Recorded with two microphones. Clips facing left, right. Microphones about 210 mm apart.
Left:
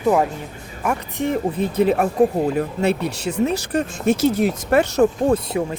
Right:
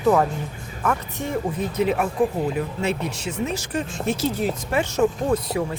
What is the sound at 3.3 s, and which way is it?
Speech, 65° left (ahead or behind).